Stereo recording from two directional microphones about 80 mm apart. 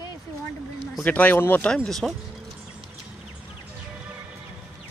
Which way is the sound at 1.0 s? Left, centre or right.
Centre.